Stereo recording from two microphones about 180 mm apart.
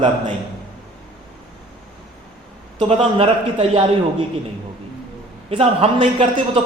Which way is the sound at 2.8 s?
30° right (ahead or behind).